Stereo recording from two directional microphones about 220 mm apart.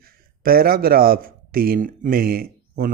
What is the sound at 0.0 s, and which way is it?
Speech, 40° right (ahead or behind).